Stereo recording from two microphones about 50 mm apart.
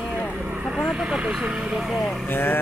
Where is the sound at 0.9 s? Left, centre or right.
Centre.